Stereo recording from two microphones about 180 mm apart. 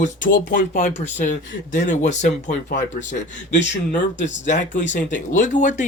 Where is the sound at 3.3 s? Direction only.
80° left.